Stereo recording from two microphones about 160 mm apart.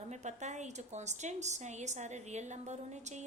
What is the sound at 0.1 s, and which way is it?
A woman's voice, 45° right (ahead or behind).